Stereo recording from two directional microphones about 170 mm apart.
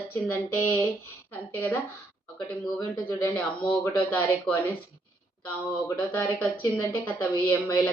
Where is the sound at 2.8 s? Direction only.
15° left (ahead or behind).